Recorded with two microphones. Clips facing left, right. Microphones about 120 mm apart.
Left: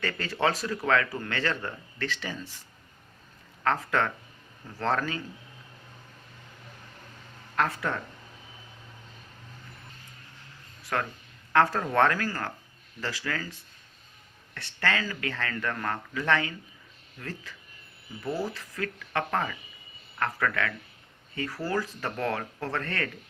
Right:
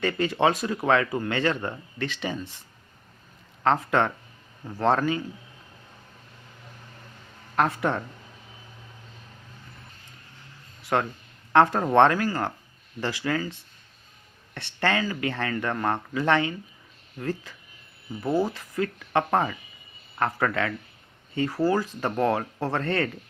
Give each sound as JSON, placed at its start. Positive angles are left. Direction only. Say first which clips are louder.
{"t": 0.0, "sound": "speech", "louder": "right 5 dB", "side_deg": -20}
{"t": 3.6, "sound": "speech", "louder": "right 4 dB", "side_deg": -25}
{"t": 7.5, "sound": "speech", "louder": "right 4 dB", "side_deg": -20}
{"t": 10.9, "sound": "speech", "louder": "right 5 dB", "side_deg": -25}